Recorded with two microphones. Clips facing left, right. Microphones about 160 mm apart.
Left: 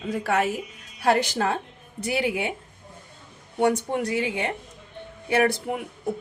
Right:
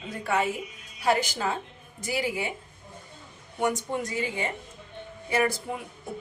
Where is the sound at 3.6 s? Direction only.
65° left (ahead or behind).